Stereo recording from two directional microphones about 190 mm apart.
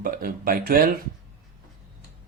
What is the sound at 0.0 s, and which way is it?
Speech, 50° right (ahead or behind).